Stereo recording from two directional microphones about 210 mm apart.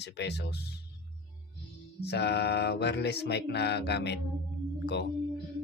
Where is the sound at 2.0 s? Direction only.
50° left (ahead or behind).